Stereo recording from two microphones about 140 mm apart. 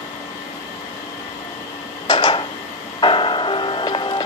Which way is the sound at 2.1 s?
35° left (ahead or behind).